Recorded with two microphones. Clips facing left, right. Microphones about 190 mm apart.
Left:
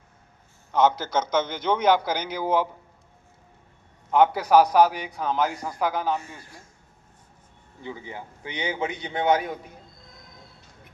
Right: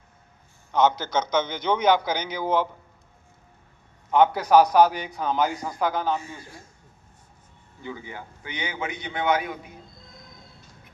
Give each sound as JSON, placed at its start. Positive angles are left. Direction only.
{"t": 0.7, "sound": "a man's voice", "side_deg": 5}
{"t": 4.1, "sound": "a man's voice", "side_deg": 5}
{"t": 7.8, "sound": "a man's voice", "side_deg": 25}